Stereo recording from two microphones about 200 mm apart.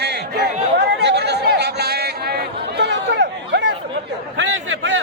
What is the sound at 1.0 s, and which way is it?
Chatter, 55° right (ahead or behind).